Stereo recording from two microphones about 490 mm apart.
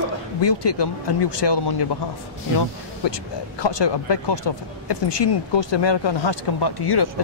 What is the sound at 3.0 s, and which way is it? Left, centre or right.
Speech, left.